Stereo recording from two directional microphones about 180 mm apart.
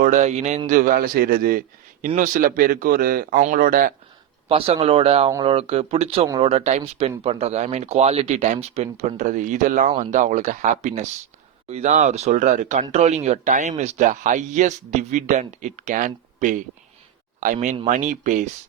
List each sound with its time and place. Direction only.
0.0 s a man's voice: 45° right (ahead or behind)
4.4 s a man's voice: 30° right (ahead or behind)